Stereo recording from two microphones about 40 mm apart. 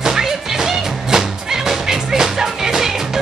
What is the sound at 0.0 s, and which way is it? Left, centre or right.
Music, centre.